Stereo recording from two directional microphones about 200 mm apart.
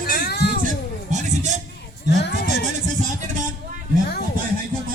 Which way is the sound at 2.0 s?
55° left (ahead or behind).